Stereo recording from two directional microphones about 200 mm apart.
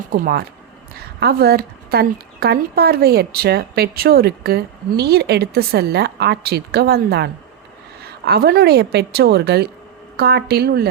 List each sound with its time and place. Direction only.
0.1 s a woman's voice: 50° right (ahead or behind)